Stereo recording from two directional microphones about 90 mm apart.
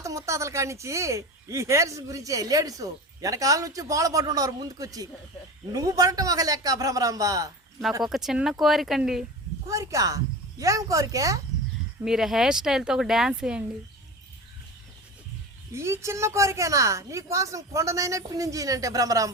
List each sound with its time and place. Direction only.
0.0 s speech: 35° right (ahead or behind)
8.0 s speech: 5° right (ahead or behind)
9.6 s speech: 40° right (ahead or behind)
12.0 s speech: 5° right (ahead or behind)
15.7 s speech: 30° right (ahead or behind)